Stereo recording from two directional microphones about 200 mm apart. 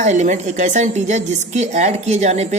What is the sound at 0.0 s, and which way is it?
A woman's voice, 35° right (ahead or behind).